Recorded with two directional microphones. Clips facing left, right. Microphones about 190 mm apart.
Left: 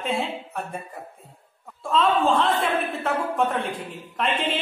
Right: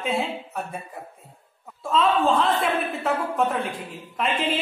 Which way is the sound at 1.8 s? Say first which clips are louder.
Even; centre (ahead or behind).